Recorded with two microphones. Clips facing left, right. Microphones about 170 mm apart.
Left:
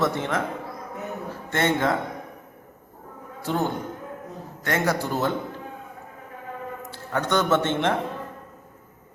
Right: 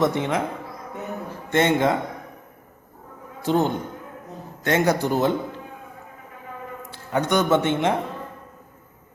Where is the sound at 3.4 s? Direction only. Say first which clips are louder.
Right 4 dB; 20° right (ahead or behind).